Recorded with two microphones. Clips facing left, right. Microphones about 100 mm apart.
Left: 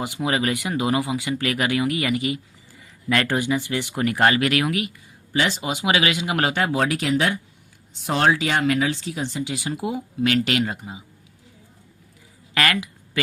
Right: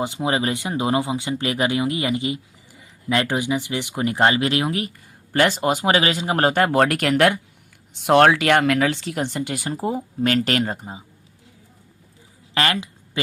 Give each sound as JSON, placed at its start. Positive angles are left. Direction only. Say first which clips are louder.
{"t": 0.0, "sound": "speech", "louder": "right 1 dB", "side_deg": -25}
{"t": 4.9, "sound": "speech", "louder": "right 4 dB", "side_deg": -55}
{"t": 9.7, "sound": "speech", "louder": "right 2 dB", "side_deg": -35}
{"t": 12.5, "sound": "speech", "louder": "even", "side_deg": -25}